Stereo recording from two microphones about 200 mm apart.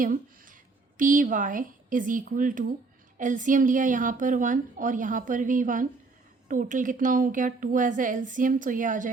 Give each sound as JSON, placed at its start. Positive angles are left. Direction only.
{"t": 0.0, "sound": "a woman's voice", "side_deg": -40}